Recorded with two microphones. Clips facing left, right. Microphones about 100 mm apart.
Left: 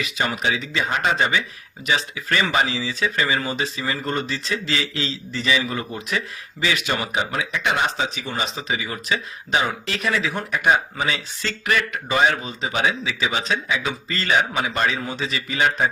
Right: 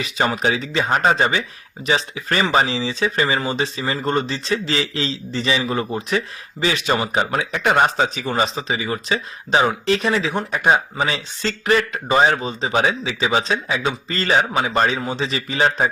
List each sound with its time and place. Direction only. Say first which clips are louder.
0.0 s speech: right 4 dB; 35° right (ahead or behind)